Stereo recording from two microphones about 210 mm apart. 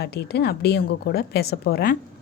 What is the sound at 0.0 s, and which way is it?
Speech, 50° left (ahead or behind).